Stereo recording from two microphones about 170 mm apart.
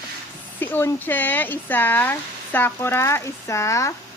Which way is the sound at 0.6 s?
10° left (ahead or behind).